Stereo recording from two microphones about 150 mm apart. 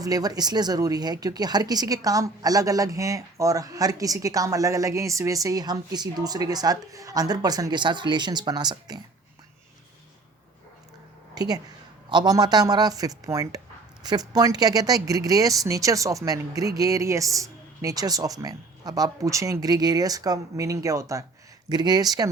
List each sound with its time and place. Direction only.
0.0 s speech: 25° right (ahead or behind)
11.3 s speech: 25° right (ahead or behind)